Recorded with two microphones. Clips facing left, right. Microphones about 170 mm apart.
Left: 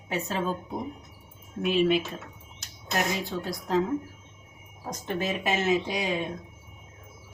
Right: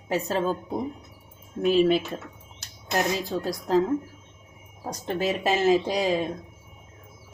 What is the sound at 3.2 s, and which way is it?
Speech, 35° right (ahead or behind).